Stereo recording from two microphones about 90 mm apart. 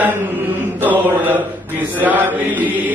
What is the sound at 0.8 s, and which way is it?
Chant, 20° right (ahead or behind).